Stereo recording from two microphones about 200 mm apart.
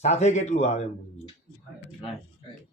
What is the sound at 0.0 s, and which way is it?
Speech, 35° left (ahead or behind).